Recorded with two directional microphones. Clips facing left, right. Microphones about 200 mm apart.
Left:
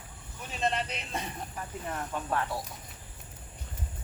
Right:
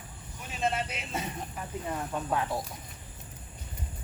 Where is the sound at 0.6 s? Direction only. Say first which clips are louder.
Even; 5° right (ahead or behind).